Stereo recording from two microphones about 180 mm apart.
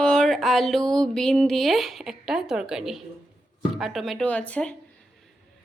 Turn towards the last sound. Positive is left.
turn(degrees=5)  # may be behind; listen again after turning